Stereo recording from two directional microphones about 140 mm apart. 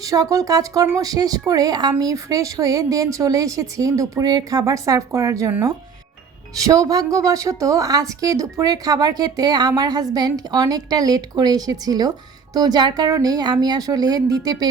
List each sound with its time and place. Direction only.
0.0 s speech: 25° right (ahead or behind)